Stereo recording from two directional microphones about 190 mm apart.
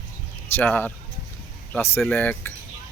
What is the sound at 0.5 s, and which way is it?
Speech, 10° left (ahead or behind).